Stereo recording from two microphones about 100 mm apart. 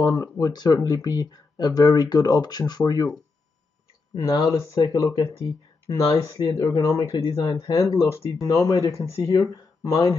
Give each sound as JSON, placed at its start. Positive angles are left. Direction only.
{"t": 0.0, "sound": "speech", "side_deg": 35}
{"t": 4.1, "sound": "speech", "side_deg": 30}
{"t": 7.1, "sound": "speech", "side_deg": 70}
{"t": 7.3, "sound": "speech", "side_deg": 35}